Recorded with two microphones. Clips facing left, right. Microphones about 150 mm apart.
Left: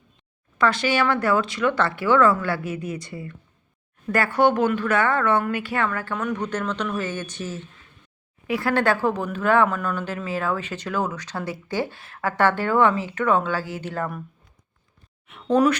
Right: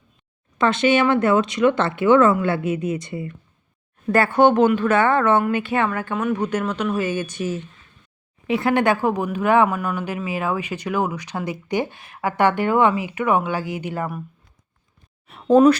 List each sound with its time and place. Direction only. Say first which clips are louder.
0.6 s speech: right 4 dB; 20° right (ahead or behind)
8.4 s speech: right 3 dB; 20° right (ahead or behind)
15.5 s speech: right 6 dB; 25° right (ahead or behind)